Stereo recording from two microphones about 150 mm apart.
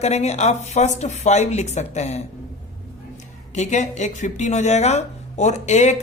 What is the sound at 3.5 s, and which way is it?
A woman's voice, 50° left (ahead or behind).